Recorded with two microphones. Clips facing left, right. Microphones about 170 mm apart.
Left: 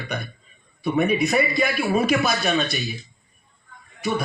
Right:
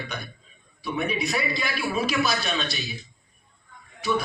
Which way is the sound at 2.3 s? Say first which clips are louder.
Left 6 dB; centre (ahead or behind).